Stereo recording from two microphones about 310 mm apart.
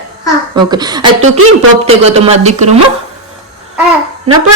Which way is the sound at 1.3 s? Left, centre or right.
Right.